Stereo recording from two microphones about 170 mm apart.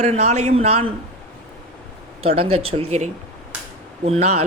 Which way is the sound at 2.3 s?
35° right (ahead or behind).